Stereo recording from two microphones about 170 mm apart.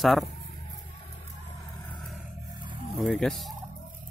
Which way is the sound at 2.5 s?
25° right (ahead or behind).